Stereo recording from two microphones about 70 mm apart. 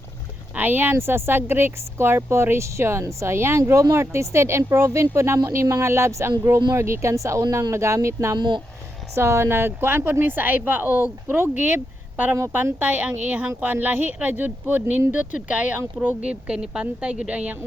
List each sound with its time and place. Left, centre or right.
0.5 s speech: right
8.4 s speech: right
9.1 s a woman's voice: right; by 17.6 s centre